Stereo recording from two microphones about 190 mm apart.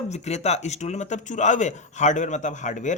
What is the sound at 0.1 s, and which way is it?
Speech, 35° left (ahead or behind).